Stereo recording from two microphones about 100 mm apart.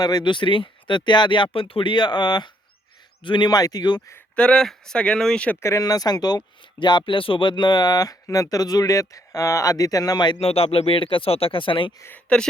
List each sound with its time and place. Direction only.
0.0 s speech: 45° left (ahead or behind)
4.4 s speech: 10° left (ahead or behind)
5.5 s speech: 30° left (ahead or behind)
5.8 s speech: 40° left (ahead or behind)
10.4 s speech: 75° left (ahead or behind); by 11.9 s 55° left (ahead or behind)
11.9 s speech: 25° left (ahead or behind)